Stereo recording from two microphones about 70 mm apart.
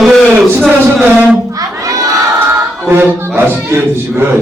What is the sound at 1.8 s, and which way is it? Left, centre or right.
Crowd, right.